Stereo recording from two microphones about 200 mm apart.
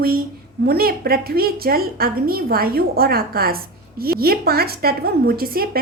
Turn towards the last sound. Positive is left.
turn(degrees=-50)  # may be behind; listen again after turning